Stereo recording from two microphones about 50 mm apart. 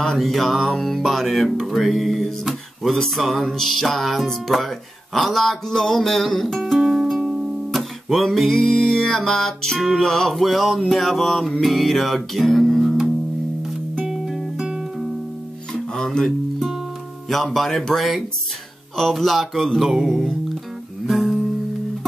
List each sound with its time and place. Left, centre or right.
0.2 s music: centre
7.7 s music: centre
9.8 s music: centre
10.0 s music: centre
15.7 s music: centre
17.3 s music: centre